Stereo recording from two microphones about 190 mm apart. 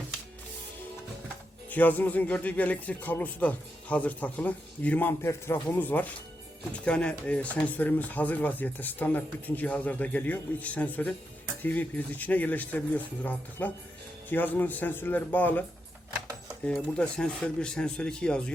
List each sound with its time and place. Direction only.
1.7 s speech: 10° left (ahead or behind)
16.6 s speech: 5° left (ahead or behind)